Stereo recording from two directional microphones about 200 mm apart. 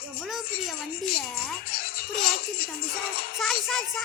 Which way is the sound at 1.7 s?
50° left (ahead or behind).